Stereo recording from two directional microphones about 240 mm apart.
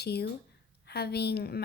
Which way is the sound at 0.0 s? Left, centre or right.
Left.